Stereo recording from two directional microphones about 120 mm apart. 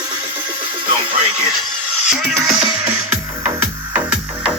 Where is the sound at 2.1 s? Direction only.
5° right (ahead or behind).